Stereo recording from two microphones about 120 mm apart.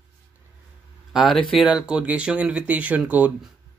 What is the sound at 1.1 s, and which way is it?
Speech, centre (ahead or behind).